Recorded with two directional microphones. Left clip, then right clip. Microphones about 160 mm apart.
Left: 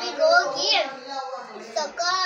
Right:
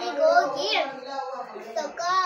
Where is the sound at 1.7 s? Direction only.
20° right (ahead or behind).